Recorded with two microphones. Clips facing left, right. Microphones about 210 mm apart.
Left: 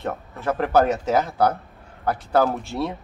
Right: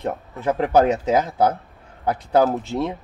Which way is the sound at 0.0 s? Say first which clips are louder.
Right 3 dB; 15° right (ahead or behind).